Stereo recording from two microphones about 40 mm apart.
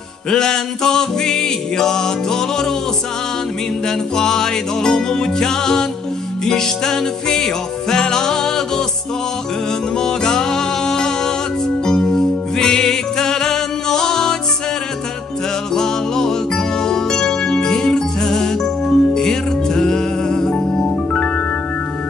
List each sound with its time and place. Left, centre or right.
0.3 s music: centre
3.8 s music: centre
9.9 s music: centre
15.7 s music: centre